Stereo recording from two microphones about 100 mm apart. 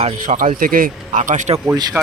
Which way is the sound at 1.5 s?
60° right (ahead or behind).